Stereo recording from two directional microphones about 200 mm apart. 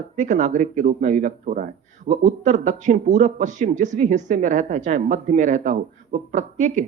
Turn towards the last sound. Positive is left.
turn(degrees=-40)  # may be behind; listen again after turning